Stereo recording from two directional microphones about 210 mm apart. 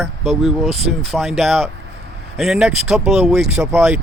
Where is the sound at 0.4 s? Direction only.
Centre (ahead or behind).